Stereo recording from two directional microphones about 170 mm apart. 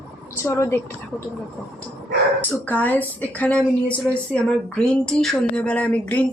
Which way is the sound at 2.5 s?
10° left (ahead or behind).